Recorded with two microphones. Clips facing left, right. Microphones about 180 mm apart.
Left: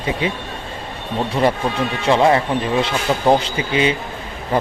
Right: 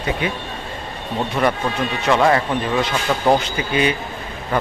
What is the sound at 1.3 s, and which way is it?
A man's voice, 30° left (ahead or behind).